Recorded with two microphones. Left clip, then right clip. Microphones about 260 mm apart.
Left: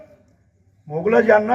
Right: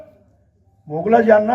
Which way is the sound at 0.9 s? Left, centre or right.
Right.